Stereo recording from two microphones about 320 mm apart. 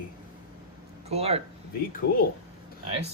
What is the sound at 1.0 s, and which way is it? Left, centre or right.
Speech, centre.